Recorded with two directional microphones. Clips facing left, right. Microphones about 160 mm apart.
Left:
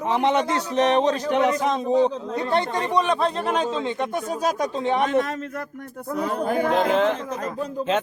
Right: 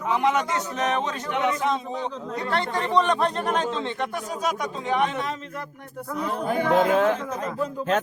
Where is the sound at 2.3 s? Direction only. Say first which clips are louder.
Left 2 dB; 20° left (ahead or behind).